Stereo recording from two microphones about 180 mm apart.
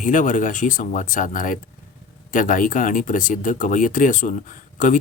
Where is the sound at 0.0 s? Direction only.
45° left (ahead or behind).